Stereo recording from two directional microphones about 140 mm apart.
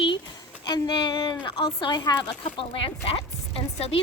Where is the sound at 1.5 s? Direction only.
35° left (ahead or behind).